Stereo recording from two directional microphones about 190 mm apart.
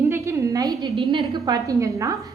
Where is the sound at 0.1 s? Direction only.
15° right (ahead or behind).